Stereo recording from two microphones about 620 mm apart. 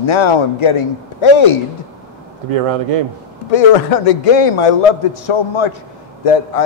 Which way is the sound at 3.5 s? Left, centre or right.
Left.